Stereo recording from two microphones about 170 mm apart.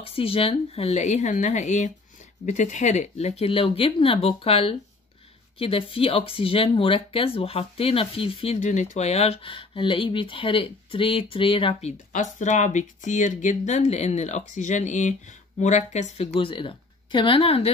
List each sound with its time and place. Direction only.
0.0 s speech: 35° left (ahead or behind)
12.1 s speech: 45° left (ahead or behind)
16.3 s speech: 30° left (ahead or behind)